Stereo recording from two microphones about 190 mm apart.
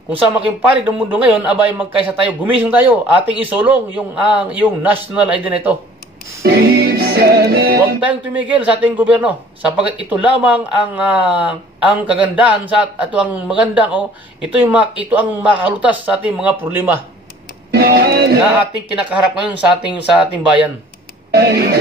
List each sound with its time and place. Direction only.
0.4 s speech: 10° right (ahead or behind)
6.4 s music: 60° right (ahead or behind)
8.0 s speech: 5° right (ahead or behind)
17.6 s speech: 55° right (ahead or behind)
18.9 s speech: 5° right (ahead or behind)
21.3 s music: 55° right (ahead or behind)